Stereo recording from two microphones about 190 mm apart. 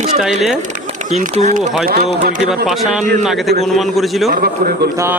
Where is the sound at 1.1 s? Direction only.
35° right (ahead or behind).